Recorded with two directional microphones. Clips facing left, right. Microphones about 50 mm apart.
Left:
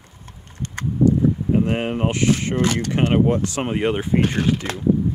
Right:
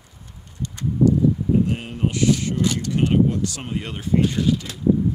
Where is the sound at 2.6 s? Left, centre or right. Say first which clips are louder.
Left 1 dB; left.